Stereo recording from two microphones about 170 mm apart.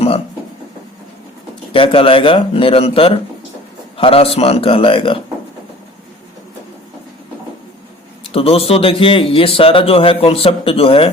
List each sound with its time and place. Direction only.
1.7 s a man's voice: 30° left (ahead or behind)
8.3 s a man's voice: 35° left (ahead or behind)